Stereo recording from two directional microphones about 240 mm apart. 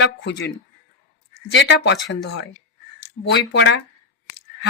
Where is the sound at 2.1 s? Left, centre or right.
Left.